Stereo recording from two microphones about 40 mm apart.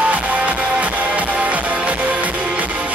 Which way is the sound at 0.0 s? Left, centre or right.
Right.